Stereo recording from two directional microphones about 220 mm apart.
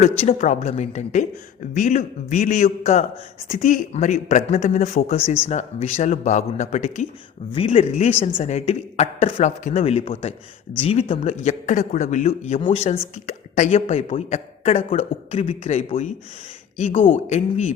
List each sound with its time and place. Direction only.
0.2 s speech: 30° left (ahead or behind)